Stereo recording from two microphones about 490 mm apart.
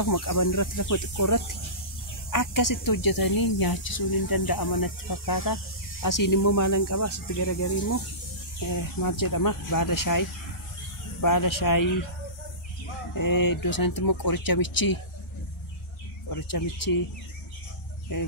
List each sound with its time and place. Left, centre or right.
0.0 s speech: left
8.6 s speech: left
13.1 s speech: left
16.3 s speech: left